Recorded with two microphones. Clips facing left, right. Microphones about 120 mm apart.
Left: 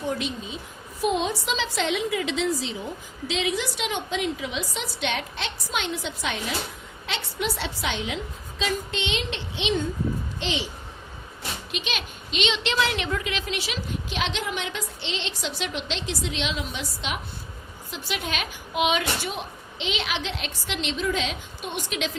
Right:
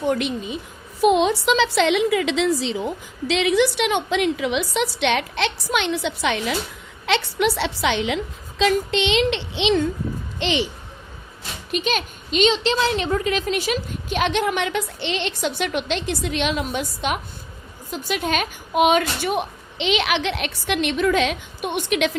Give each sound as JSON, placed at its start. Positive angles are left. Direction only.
{"t": 0.1, "sound": "speech", "side_deg": -65}
{"t": 1.0, "sound": "a woman's voice", "side_deg": -75}
{"t": 3.2, "sound": "a woman's voice", "side_deg": -70}
{"t": 10.4, "sound": "speech", "side_deg": -65}
{"t": 11.7, "sound": "a woman's voice", "side_deg": -45}